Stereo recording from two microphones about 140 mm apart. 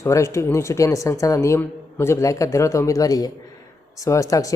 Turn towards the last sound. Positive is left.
turn(degrees=25)  # may be behind; listen again after turning